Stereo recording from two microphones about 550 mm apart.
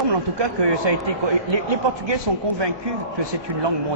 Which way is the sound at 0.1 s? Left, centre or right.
Right.